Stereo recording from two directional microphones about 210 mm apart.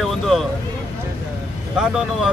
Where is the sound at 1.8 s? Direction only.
5° right (ahead or behind).